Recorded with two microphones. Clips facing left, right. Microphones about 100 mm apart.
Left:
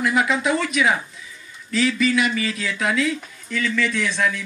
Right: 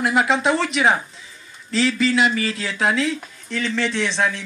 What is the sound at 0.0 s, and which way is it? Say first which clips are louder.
A man's voice: right 2 dB; 30° right (ahead or behind).